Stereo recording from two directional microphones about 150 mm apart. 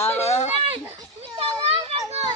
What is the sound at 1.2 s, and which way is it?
Speech, 40° right (ahead or behind).